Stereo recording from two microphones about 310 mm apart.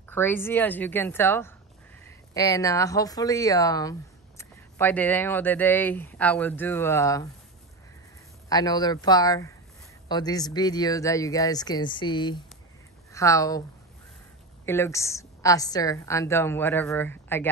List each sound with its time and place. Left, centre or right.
0.1 s speech: centre
8.5 s speech: centre
14.7 s speech: centre